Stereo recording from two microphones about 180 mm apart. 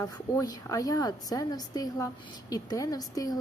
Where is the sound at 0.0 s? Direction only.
20° left (ahead or behind).